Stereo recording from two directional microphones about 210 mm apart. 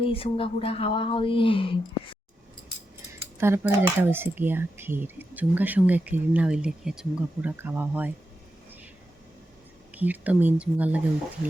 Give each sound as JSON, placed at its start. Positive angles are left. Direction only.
{"t": 0.1, "sound": "speech", "side_deg": 25}
{"t": 3.3, "sound": "speech", "side_deg": -10}
{"t": 9.9, "sound": "speech", "side_deg": -10}